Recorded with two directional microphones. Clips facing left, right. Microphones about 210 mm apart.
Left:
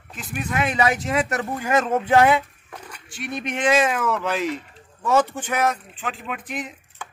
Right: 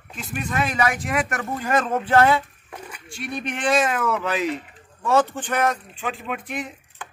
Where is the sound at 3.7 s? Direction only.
5° left (ahead or behind).